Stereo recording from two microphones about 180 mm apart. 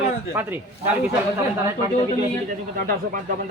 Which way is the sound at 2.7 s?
50° right (ahead or behind).